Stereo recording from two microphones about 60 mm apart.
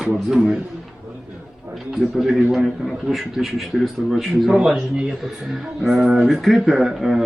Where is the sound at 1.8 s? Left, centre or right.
Centre.